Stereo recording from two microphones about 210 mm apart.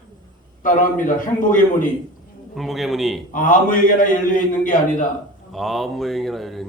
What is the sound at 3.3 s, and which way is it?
A man's voice, 40° left (ahead or behind).